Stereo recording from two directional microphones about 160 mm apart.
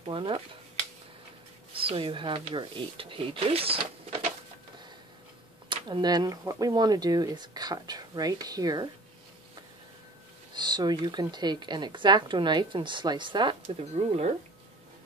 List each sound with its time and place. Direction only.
0.0 s speech: 35° right (ahead or behind)
1.7 s speech: 35° right (ahead or behind)
5.7 s speech: 30° right (ahead or behind)
10.5 s speech: 25° right (ahead or behind)